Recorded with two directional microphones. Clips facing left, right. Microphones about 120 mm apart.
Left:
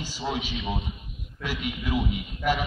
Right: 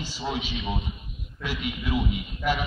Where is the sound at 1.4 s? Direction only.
45° left (ahead or behind).